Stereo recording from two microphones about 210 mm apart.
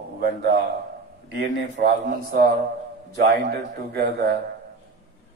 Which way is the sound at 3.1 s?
50° right (ahead or behind).